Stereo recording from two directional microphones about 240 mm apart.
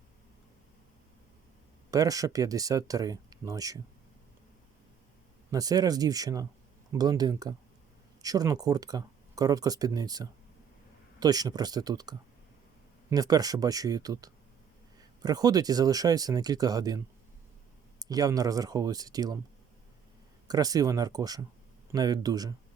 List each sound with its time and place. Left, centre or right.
1.9 s speech: centre
5.5 s speech: centre
18.0 s speech: centre
20.5 s speech: centre